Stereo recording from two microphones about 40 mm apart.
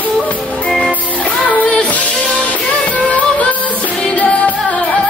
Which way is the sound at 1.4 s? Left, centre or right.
Left.